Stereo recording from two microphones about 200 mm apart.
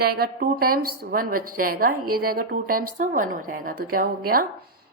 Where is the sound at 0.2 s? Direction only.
45° right (ahead or behind).